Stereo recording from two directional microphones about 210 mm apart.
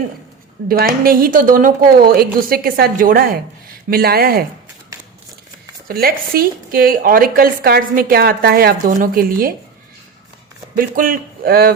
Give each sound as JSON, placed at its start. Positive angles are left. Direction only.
{"t": 0.7, "sound": "a woman's voice", "side_deg": -45}
{"t": 5.9, "sound": "a woman's voice", "side_deg": -45}
{"t": 10.8, "sound": "a woman's voice", "side_deg": -40}